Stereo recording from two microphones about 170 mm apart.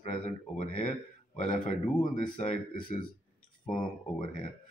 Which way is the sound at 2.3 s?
30° left (ahead or behind).